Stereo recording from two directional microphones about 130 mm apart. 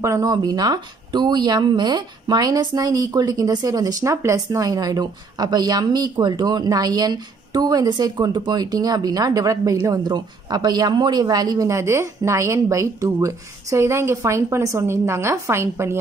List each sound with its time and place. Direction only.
0.0 s speech: 25° right (ahead or behind)